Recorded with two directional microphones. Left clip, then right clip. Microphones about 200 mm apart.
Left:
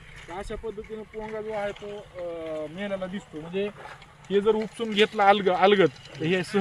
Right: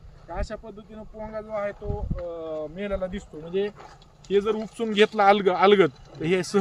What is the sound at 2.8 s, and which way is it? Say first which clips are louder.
Speech: right 2 dB; 25° right (ahead or behind).